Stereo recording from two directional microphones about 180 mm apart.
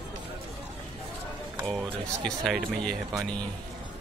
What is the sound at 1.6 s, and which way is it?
Speech, centre (ahead or behind).